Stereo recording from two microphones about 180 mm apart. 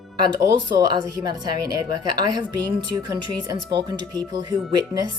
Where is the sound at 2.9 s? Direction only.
20° right (ahead or behind).